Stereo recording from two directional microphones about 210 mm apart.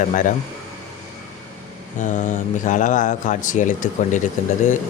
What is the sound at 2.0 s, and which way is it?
Speech, 35° left (ahead or behind).